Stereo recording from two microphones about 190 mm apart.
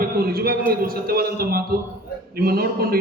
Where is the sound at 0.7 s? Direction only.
50° right (ahead or behind).